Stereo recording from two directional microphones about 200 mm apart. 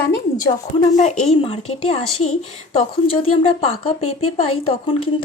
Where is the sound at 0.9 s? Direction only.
35° left (ahead or behind).